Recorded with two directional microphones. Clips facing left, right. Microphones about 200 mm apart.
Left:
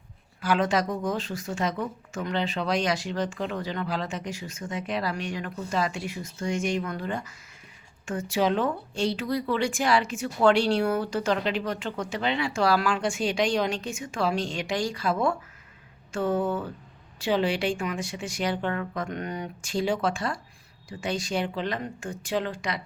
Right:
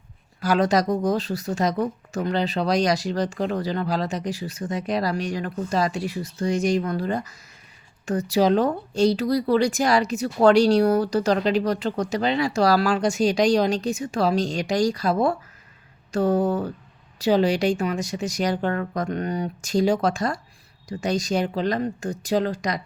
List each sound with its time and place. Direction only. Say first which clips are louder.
0.4 s speech: right 4 dB; 40° right (ahead or behind)